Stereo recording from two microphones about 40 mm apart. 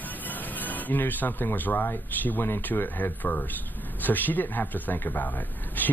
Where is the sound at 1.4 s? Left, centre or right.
Left.